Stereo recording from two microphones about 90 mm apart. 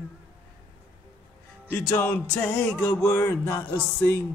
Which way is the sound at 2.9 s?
30° left (ahead or behind).